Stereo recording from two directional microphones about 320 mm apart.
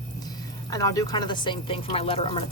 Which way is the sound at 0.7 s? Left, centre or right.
Centre.